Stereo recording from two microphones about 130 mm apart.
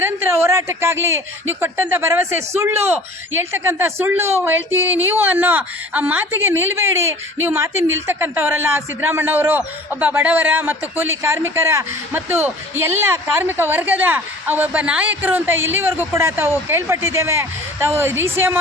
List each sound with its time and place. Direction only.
0.0 s a woman's voice: 20° right (ahead or behind)